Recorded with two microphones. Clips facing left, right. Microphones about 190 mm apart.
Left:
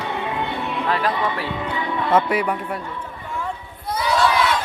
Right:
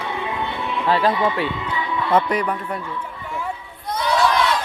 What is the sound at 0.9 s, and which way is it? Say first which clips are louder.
Speech: right 5 dB; 30° right (ahead or behind).